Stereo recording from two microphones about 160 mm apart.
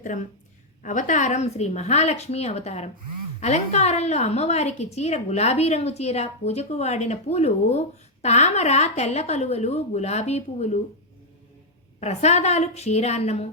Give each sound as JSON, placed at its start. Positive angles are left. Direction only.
{"t": 0.0, "sound": "a woman's voice", "side_deg": 50}
{"t": 11.9, "sound": "a woman's voice", "side_deg": 45}